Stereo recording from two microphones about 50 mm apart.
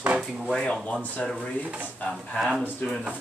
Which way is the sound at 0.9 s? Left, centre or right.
Left.